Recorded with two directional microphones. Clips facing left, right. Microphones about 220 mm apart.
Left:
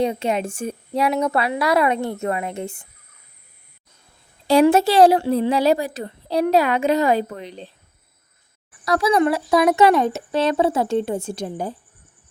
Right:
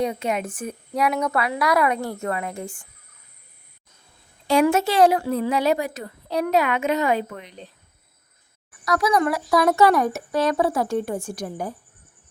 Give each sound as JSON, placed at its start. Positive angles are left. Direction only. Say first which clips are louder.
{"t": 0.0, "sound": "speech", "louder": "left 3 dB", "side_deg": 30}
{"t": 4.4, "sound": "a woman's voice", "louder": "left 4 dB", "side_deg": 35}
{"t": 8.8, "sound": "speech", "louder": "left 3 dB", "side_deg": 30}